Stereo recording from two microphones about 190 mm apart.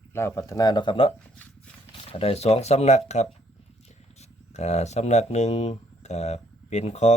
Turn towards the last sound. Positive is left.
turn(degrees=35)  # may be behind; listen again after turning